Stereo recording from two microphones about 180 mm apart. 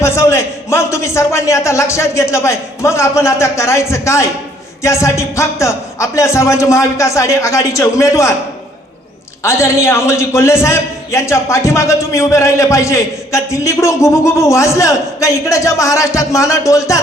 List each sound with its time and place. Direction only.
0.0 s a man's voice: 15° left (ahead or behind)
9.4 s a man's voice: 15° left (ahead or behind)